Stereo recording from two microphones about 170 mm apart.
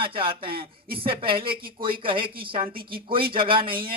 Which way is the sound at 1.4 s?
60° right (ahead or behind).